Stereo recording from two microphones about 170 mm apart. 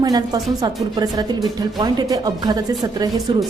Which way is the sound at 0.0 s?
20° right (ahead or behind).